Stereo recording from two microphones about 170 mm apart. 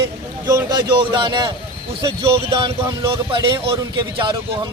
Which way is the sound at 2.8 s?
15° right (ahead or behind).